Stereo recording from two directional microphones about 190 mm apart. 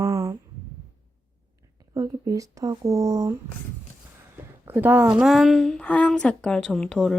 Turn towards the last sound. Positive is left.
turn(degrees=5)  # may be behind; listen again after turning